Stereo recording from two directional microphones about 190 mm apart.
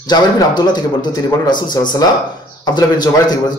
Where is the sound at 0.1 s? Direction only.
20° left (ahead or behind).